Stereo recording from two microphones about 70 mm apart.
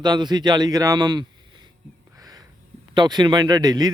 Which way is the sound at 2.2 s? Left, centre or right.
Right.